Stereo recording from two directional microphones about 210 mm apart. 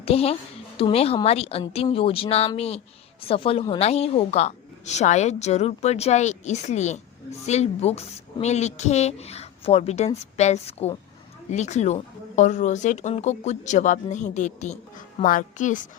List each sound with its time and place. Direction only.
0.0 s a woman's voice: 30° left (ahead or behind)